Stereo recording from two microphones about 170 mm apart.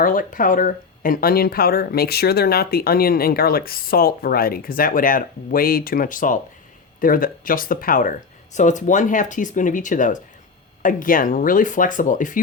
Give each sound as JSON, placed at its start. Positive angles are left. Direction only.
{"t": 0.0, "sound": "speech", "side_deg": 55}